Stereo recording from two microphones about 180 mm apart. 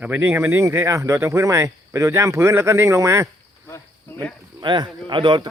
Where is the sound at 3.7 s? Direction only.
10° left (ahead or behind).